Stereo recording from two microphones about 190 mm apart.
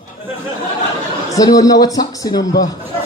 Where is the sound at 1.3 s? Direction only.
20° left (ahead or behind).